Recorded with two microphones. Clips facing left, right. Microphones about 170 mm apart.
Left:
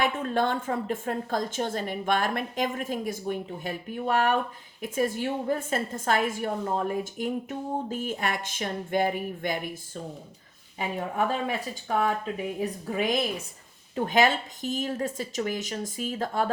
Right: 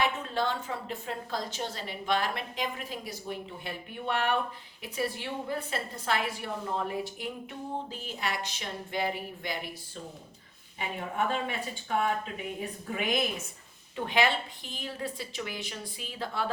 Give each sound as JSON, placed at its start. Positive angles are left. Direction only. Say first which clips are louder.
{"t": 0.0, "sound": "a woman's voice", "louder": "left 4 dB", "side_deg": 50}
{"t": 10.8, "sound": "a woman's voice", "louder": "left 4 dB", "side_deg": 40}